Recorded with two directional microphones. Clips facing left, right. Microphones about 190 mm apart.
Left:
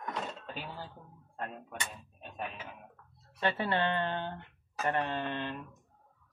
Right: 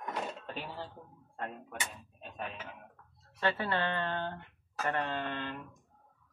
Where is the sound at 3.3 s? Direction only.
20° left (ahead or behind).